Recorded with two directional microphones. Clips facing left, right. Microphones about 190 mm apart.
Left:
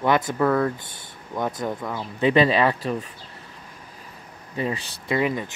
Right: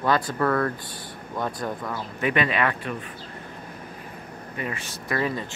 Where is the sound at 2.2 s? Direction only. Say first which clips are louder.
Left 6 dB; 30° left (ahead or behind).